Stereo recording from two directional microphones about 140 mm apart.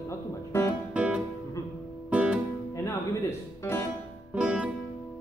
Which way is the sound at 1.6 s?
20° left (ahead or behind).